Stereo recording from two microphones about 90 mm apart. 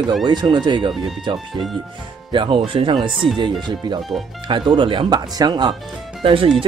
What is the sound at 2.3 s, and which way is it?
Speech, 70° right (ahead or behind).